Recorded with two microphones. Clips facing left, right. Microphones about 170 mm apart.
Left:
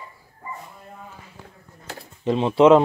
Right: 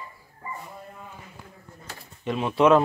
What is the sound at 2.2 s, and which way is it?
Speech, 30° left (ahead or behind).